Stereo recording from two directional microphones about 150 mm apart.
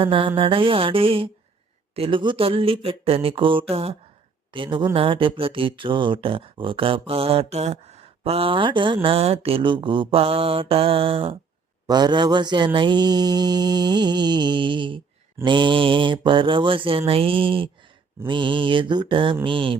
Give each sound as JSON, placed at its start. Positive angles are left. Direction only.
{"t": 0.0, "sound": "speech", "side_deg": -35}
{"t": 11.9, "sound": "mantra", "side_deg": -30}
{"t": 15.4, "sound": "speech", "side_deg": -30}